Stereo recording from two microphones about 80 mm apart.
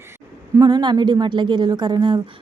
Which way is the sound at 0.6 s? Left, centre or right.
Right.